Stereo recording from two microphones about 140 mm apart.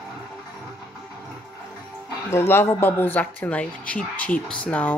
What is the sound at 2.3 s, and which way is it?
Speech, 15° left (ahead or behind).